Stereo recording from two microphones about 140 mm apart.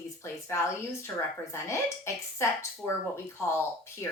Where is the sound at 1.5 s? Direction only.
20° left (ahead or behind).